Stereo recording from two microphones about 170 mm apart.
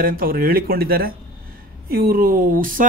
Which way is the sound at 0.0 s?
55° right (ahead or behind).